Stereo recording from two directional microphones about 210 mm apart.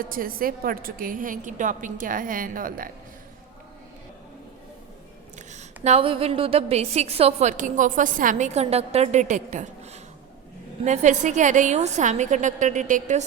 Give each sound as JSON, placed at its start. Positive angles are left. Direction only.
{"t": 0.0, "sound": "a woman's voice", "side_deg": -45}
{"t": 5.5, "sound": "a woman's voice", "side_deg": -30}